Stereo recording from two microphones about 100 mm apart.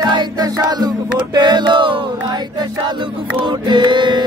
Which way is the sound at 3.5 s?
50° right (ahead or behind).